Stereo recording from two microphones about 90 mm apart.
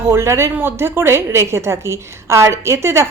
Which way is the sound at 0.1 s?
30° right (ahead or behind).